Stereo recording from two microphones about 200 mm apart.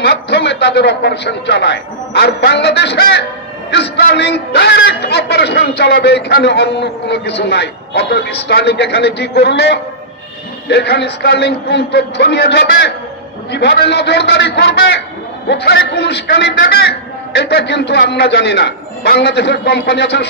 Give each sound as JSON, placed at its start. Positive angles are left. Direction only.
{"t": 0.0, "sound": "a man's voice", "side_deg": 55}